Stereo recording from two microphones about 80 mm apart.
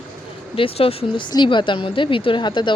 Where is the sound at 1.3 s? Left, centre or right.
Left.